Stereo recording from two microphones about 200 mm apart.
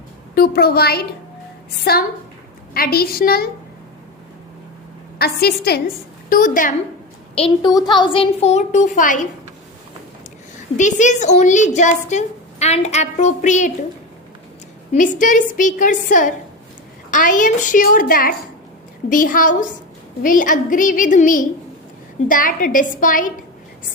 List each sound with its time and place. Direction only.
0.3 s a woman's voice: 50° left (ahead or behind)
5.1 s a woman's voice: 50° left (ahead or behind)
7.3 s a child's voice: 25° left (ahead or behind)
10.8 s a woman's voice: 40° left (ahead or behind)
14.9 s a woman's voice: 40° left (ahead or behind)